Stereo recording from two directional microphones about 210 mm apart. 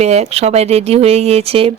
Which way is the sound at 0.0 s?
30° right (ahead or behind).